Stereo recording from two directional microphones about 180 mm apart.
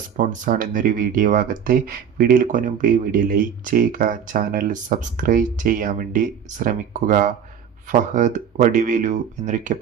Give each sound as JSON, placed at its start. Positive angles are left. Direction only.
{"t": 0.2, "sound": "speech", "side_deg": -45}